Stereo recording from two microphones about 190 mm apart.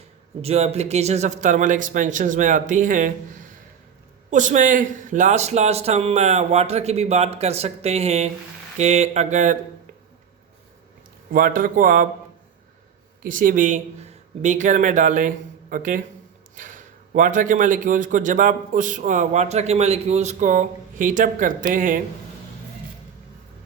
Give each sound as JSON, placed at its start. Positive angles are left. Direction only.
{"t": 0.4, "sound": "speech", "side_deg": -35}
{"t": 4.3, "sound": "speech", "side_deg": -40}
{"t": 11.3, "sound": "speech", "side_deg": -50}
{"t": 13.2, "sound": "speech", "side_deg": -45}